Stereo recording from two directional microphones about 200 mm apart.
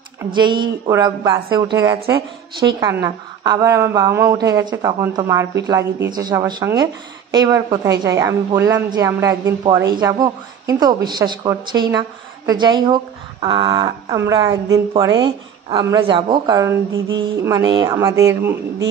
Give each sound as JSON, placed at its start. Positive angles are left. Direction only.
{"t": 0.3, "sound": "speech", "side_deg": -25}
{"t": 2.8, "sound": "a woman's voice", "side_deg": -15}